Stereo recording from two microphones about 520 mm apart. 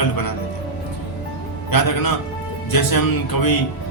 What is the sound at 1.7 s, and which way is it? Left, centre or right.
Speech, left.